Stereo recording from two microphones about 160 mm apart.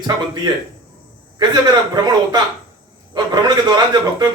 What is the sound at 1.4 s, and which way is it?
Speech, 25° right (ahead or behind).